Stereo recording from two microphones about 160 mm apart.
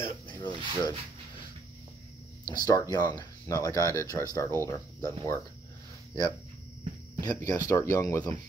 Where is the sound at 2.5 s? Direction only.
20° left (ahead or behind).